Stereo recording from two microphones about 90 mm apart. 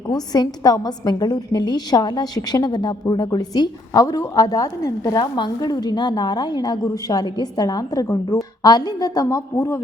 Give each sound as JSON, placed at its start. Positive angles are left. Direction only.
{"t": 0.1, "sound": "a woman's voice", "side_deg": 50}
{"t": 4.0, "sound": "a woman's voice", "side_deg": 35}
{"t": 9.2, "sound": "a woman's voice", "side_deg": 35}